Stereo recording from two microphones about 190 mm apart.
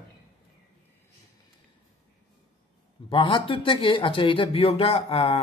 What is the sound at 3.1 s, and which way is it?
Speech, 25° left (ahead or behind).